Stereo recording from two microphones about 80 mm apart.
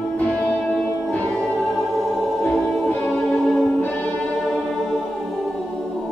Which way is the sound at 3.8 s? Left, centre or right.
Centre.